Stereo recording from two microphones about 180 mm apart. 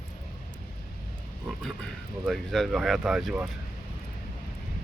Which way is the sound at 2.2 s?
Centre (ahead or behind).